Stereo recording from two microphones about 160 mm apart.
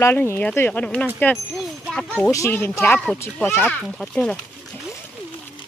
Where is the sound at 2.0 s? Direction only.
10° left (ahead or behind).